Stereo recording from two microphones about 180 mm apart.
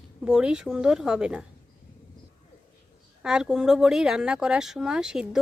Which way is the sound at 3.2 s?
5° right (ahead or behind).